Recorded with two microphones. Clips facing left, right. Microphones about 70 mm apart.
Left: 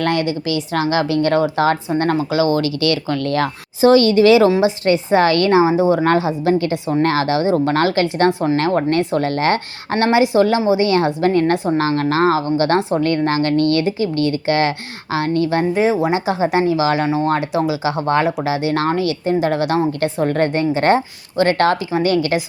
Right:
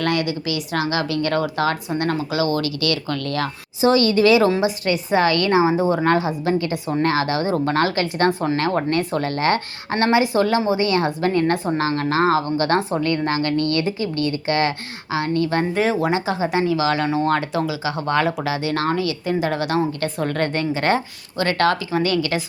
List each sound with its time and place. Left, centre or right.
0.0 s speech: left
4.1 s speech: left
4.9 s speech: left
5.5 s speech: centre
8.3 s speech: centre
8.5 s speech: left; by 10.8 s centre
10.8 s speech: left
15.7 s speech: centre; by 22.4 s left